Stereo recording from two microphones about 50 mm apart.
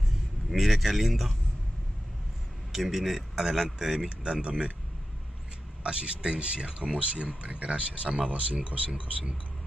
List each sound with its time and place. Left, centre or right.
0.5 s speech: centre
2.7 s a man's voice: centre
4.2 s speech: right
5.9 s speech: centre